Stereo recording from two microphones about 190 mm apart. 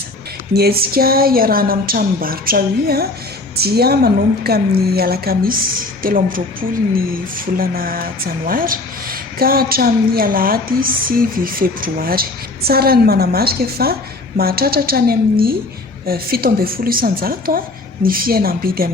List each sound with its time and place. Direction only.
0.5 s a woman's voice: 55° right (ahead or behind)